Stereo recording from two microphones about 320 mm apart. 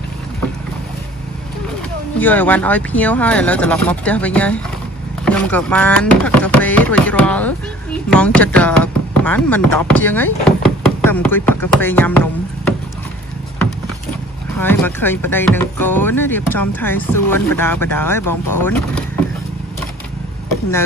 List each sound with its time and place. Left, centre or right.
2.1 s speech: centre
14.6 s speech: centre
18.2 s speech: left
18.5 s speech: centre